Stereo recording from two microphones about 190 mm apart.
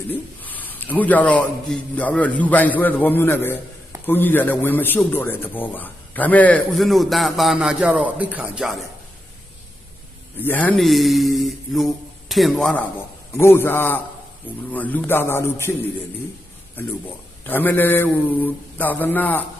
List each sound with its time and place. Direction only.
0.1 s a man's voice: 10° left (ahead or behind)
10.3 s a man's voice: 10° left (ahead or behind)
13.3 s a man's voice: 10° left (ahead or behind)